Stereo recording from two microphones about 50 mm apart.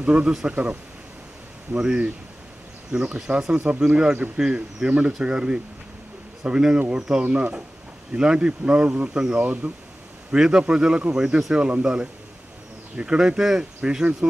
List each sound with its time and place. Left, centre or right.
0.0 s speech: right
0.3 s speech: centre
1.8 s speech: right